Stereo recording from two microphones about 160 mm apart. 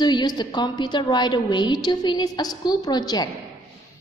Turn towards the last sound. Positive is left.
turn(degrees=25)  # may be behind; listen again after turning